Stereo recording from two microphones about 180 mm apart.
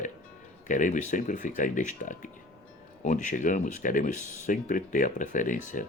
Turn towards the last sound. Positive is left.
turn(degrees=45)  # may be behind; listen again after turning